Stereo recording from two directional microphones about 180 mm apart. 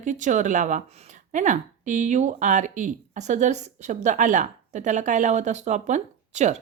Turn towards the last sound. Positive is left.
turn(degrees=-40)  # may be behind; listen again after turning